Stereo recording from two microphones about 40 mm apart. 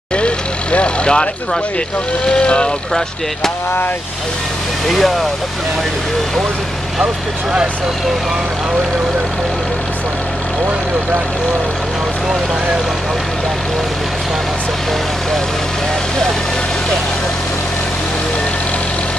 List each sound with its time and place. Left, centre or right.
0.1 s vehicle: left
2.2 s speech: left
4.8 s speech: centre